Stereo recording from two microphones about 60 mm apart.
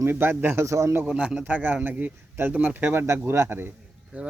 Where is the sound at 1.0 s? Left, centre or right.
Centre.